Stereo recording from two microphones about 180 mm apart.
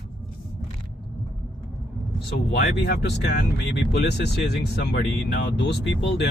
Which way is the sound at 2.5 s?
65° left (ahead or behind).